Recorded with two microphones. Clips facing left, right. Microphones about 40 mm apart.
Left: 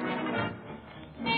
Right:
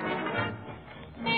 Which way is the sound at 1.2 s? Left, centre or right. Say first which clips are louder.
Even; centre.